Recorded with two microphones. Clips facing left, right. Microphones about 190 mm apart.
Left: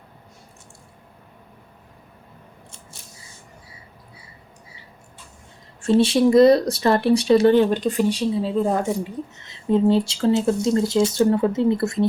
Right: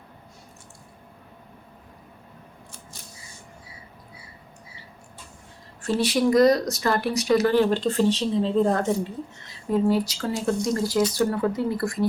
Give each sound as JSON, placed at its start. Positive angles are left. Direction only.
{"t": 5.8, "sound": "speech", "side_deg": 25}
{"t": 9.6, "sound": "speech", "side_deg": 25}